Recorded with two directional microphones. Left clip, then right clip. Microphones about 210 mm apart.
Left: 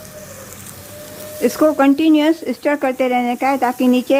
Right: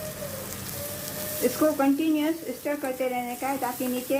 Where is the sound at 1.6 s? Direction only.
50° left (ahead or behind).